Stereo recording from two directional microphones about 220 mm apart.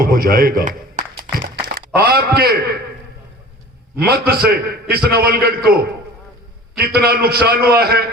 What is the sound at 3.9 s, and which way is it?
A man's voice, 45° right (ahead or behind).